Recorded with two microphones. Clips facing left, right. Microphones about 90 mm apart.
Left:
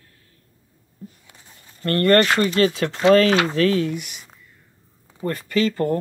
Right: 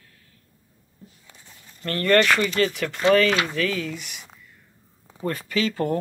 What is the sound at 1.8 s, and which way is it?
Speech, 50° left (ahead or behind).